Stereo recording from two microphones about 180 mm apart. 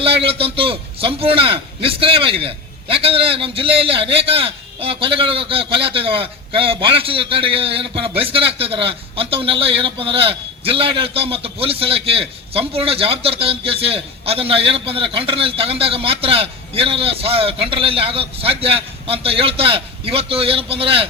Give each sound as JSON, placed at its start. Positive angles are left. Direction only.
{"t": 0.0, "sound": "a man's voice", "side_deg": -30}